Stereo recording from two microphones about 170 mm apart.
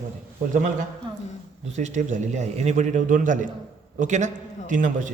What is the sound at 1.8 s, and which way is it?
A man's voice, 45° right (ahead or behind).